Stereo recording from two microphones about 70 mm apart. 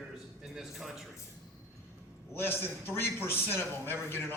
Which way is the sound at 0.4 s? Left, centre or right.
Centre.